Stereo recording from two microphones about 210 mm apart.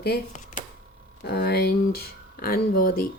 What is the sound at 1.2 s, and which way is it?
Speech, 50° left (ahead or behind).